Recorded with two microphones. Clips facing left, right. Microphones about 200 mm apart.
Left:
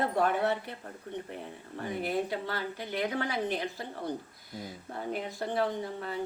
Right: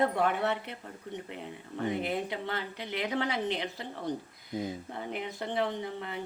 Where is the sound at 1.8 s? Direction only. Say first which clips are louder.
Even; 20° right (ahead or behind).